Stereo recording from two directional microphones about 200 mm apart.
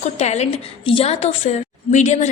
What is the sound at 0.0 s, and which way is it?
A woman's voice, 35° left (ahead or behind).